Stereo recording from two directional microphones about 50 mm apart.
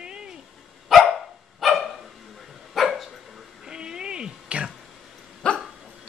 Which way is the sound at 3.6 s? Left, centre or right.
Centre.